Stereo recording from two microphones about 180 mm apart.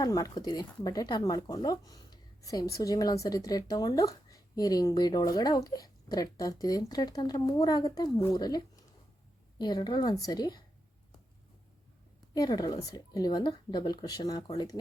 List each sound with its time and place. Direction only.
0.0 s speech: 20° left (ahead or behind)
12.3 s speech: 20° left (ahead or behind)